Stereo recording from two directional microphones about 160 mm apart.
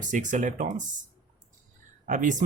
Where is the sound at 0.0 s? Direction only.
50° right (ahead or behind).